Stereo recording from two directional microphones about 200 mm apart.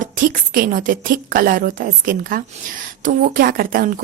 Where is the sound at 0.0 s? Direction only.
45° right (ahead or behind).